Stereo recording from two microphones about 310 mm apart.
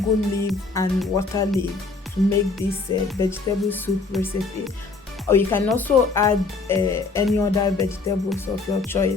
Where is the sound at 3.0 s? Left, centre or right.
Centre.